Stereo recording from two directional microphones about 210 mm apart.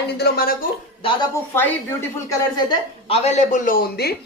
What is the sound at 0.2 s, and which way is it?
Speech, 45° left (ahead or behind).